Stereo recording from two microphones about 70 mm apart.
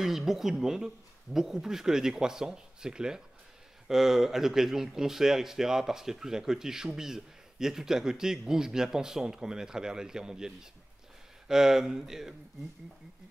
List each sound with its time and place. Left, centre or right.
0.0 s speech: centre